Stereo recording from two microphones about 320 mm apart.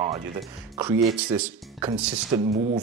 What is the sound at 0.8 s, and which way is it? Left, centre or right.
Speech, centre.